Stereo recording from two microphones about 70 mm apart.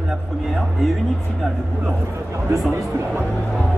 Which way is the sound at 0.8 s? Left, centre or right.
Centre.